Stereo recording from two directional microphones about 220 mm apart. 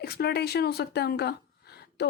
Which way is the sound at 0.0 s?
45° left (ahead or behind).